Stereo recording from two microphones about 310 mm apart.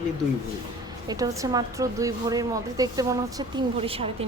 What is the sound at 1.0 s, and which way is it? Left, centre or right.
A woman's voice, centre.